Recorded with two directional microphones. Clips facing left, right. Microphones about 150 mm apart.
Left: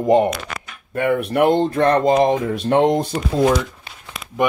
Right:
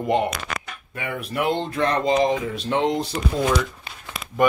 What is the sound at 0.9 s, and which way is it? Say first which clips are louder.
Speech: left 11 dB; 60° left (ahead or behind).